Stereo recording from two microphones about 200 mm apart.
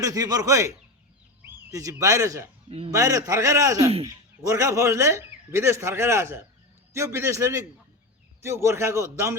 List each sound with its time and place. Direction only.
0.0 s speech: 15° right (ahead or behind)
2.6 s speech: 30° right (ahead or behind)
2.9 s speech: 15° right (ahead or behind)